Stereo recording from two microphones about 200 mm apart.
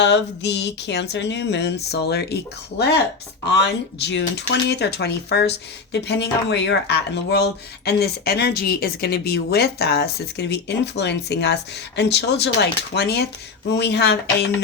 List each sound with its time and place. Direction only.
0.0 s speech: 60° left (ahead or behind)